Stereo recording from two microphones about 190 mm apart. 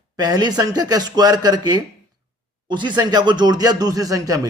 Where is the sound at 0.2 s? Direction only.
20° right (ahead or behind).